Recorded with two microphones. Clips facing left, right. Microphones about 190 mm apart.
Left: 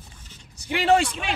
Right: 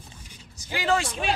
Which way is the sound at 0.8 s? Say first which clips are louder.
Left 5 dB; 65° left (ahead or behind).